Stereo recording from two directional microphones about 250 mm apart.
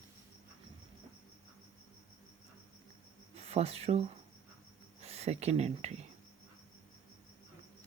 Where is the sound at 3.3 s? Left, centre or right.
Right.